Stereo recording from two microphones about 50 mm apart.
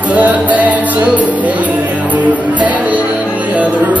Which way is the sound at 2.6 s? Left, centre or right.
Right.